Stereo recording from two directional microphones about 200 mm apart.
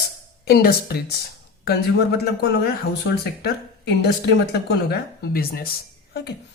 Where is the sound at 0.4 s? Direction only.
50° left (ahead or behind).